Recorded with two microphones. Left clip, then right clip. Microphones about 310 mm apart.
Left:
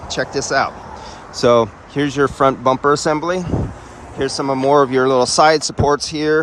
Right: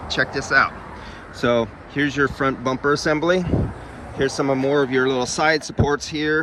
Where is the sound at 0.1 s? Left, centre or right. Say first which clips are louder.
Left 1 dB; centre.